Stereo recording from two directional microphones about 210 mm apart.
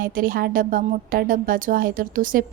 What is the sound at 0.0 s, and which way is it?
A woman's voice, 40° right (ahead or behind).